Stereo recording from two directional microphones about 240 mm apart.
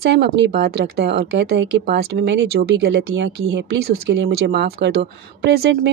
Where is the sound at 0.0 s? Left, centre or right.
Right.